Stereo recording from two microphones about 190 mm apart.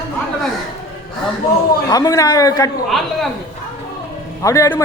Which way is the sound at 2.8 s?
Centre (ahead or behind).